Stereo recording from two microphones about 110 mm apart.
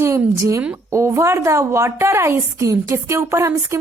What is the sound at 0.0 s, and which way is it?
A woman's voice, 25° right (ahead or behind).